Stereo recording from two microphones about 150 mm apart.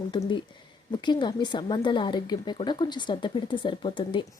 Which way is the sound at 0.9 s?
30° left (ahead or behind).